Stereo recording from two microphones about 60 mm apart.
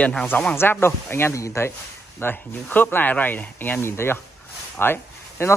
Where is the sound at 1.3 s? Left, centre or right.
Left.